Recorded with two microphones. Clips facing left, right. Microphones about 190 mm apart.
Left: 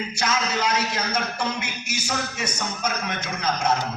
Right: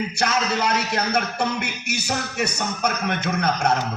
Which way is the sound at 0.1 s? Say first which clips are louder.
Right 3 dB; 60° right (ahead or behind).